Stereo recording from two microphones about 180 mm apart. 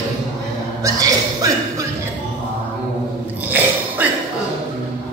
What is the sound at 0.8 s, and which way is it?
Speech, 20° right (ahead or behind).